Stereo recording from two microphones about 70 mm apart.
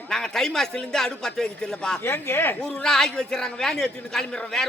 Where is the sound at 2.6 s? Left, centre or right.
Centre.